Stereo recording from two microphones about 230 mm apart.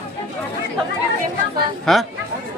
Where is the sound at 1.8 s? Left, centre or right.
Centre.